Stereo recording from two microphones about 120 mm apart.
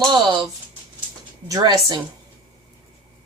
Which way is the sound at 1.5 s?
35° right (ahead or behind).